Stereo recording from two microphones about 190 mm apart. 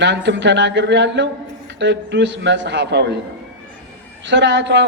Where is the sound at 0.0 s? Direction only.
70° right (ahead or behind).